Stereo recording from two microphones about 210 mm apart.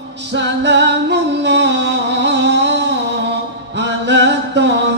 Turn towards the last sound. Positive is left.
turn(degrees=-55)  # may be behind; listen again after turning